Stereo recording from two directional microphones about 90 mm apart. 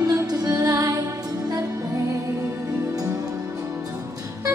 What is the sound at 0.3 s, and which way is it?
Music, 40° right (ahead or behind).